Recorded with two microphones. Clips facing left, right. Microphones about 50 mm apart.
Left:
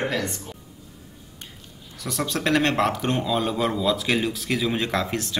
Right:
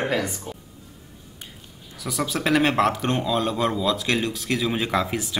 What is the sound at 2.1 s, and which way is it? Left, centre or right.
A man's voice, centre.